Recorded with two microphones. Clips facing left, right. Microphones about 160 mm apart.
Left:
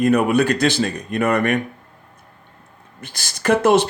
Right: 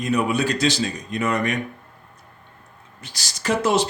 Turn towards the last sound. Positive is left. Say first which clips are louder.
# left 5 dB
turn(degrees=55)  # may be behind; listen again after turning